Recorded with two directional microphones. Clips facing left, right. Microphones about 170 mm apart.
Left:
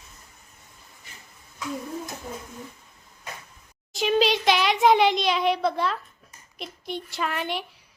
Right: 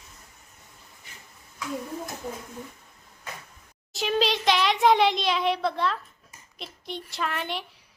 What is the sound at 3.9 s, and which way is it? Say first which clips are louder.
A child's voice: left 3 dB; centre (ahead or behind).